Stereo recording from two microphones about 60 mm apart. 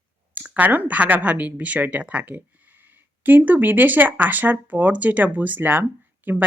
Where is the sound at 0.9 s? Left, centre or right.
Right.